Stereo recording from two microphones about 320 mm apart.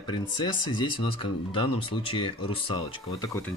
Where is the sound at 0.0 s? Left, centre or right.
Centre.